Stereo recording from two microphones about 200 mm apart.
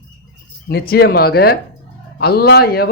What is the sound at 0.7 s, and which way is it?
Speech, 50° left (ahead or behind).